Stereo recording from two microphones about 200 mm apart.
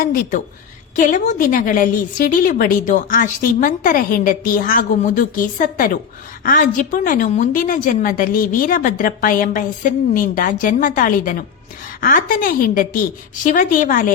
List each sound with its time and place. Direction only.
0.0 s a woman's voice: 40° left (ahead or behind)